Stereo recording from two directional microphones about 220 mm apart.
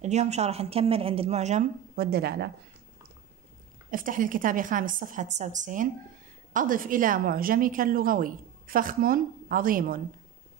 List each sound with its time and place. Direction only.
0.0 s a woman's voice: 30° right (ahead or behind); by 2.5 s 45° right (ahead or behind)
3.9 s a woman's voice: 40° right (ahead or behind)